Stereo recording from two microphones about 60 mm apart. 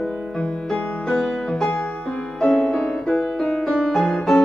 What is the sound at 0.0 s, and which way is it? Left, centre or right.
Music, centre.